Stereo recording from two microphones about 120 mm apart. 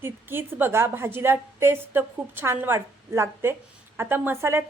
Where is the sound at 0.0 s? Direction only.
20° right (ahead or behind).